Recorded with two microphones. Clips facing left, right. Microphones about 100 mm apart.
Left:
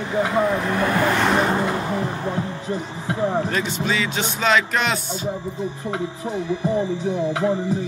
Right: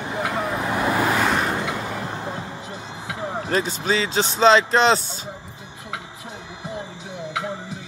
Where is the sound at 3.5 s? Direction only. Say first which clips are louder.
Right 1 dB; 35° right (ahead or behind).